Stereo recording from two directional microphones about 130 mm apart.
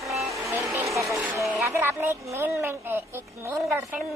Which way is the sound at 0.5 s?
15° right (ahead or behind).